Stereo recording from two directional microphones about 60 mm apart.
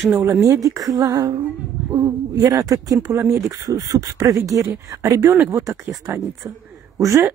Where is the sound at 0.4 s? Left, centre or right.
Right.